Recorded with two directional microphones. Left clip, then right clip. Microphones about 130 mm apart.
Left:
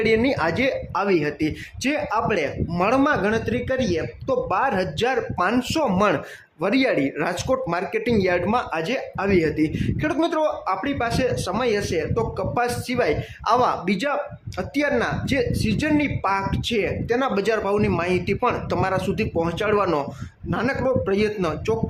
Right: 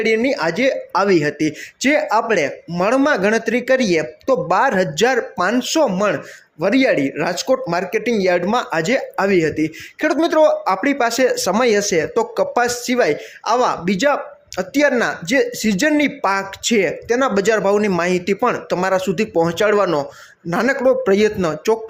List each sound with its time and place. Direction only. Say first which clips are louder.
0.0 s speech: right 3 dB; 15° right (ahead or behind)
0.9 s speech: right 6 dB; 30° right (ahead or behind)
2.7 s speech: right 4 dB; 20° right (ahead or behind)
9.3 s speech: right 1 dB; 20° right (ahead or behind)
10.0 s speech: right 8 dB; 30° right (ahead or behind)
13.4 s speech: right 2 dB; 20° right (ahead or behind)
19.8 s speech: right 4 dB; 20° right (ahead or behind)
20.5 s speech: right 7 dB; 35° right (ahead or behind)